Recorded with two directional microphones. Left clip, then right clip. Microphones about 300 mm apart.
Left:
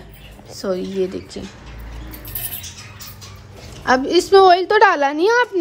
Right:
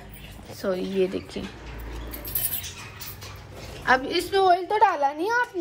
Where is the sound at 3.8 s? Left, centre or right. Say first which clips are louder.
Left 6 dB; centre.